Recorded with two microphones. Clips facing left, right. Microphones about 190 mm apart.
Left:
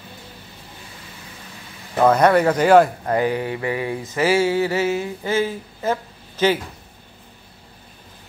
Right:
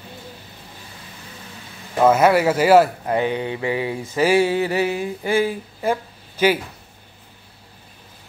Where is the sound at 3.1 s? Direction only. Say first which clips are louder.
Left 1 dB; 20° right (ahead or behind).